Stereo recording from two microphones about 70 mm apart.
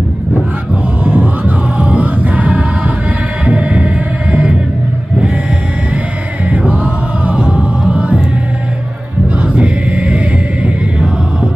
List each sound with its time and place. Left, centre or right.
1.0 s music: centre
6.5 s music: centre
9.4 s a sound: centre